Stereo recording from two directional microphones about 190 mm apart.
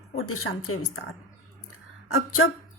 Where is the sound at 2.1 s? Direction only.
90° left.